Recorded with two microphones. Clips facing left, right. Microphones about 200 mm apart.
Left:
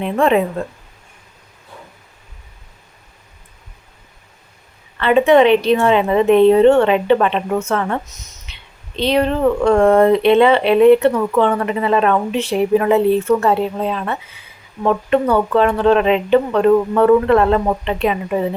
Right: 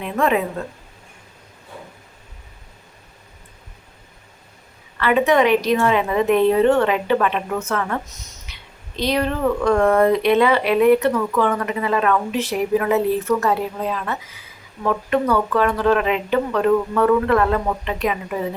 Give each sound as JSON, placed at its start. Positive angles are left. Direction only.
{"t": 0.0, "sound": "speech", "side_deg": 30}
{"t": 4.9, "sound": "speech", "side_deg": 25}
{"t": 8.1, "sound": "a sound", "side_deg": 20}
{"t": 9.0, "sound": "speech", "side_deg": 25}